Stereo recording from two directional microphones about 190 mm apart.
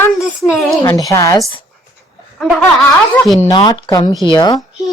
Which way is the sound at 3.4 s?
20° left (ahead or behind).